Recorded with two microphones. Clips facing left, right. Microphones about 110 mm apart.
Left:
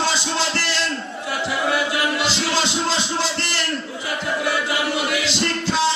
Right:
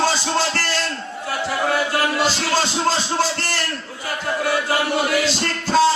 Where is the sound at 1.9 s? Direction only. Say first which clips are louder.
Right 2 dB; 45° right (ahead or behind).